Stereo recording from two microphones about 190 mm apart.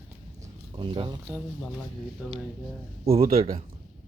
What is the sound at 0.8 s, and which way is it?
Speech, 25° right (ahead or behind).